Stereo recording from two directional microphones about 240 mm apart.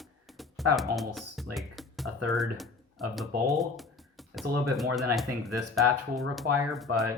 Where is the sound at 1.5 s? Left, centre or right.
Centre.